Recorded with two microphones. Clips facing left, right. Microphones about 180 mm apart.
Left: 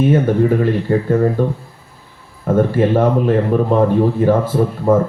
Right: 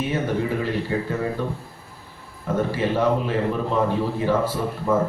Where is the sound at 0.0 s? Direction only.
50° left (ahead or behind).